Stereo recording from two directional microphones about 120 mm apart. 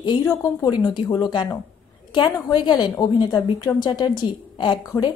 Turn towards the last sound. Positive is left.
turn(degrees=40)  # may be behind; listen again after turning